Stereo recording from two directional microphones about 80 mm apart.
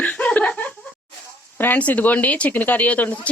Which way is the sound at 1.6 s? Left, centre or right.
Left.